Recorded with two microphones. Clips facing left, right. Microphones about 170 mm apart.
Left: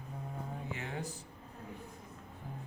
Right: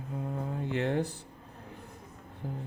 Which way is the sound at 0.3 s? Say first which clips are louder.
Right 8 dB; 65° right (ahead or behind).